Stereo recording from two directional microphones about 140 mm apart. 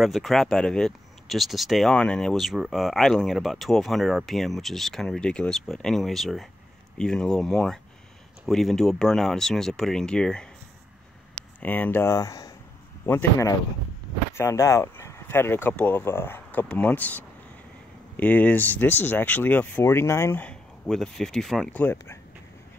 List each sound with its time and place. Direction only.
0.0 s speech: centre (ahead or behind)
11.6 s speech: 10° left (ahead or behind)
21.9 s speech: 20° left (ahead or behind)